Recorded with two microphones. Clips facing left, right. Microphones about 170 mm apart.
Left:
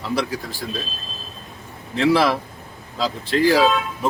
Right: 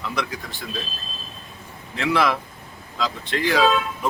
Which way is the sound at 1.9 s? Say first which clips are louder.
Left 4 dB; 30° left (ahead or behind).